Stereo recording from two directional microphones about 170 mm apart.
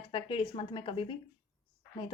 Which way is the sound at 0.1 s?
30° left (ahead or behind).